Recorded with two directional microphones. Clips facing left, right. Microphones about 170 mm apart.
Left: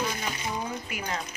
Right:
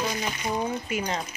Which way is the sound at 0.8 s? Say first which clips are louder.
Right 6 dB; 25° right (ahead or behind).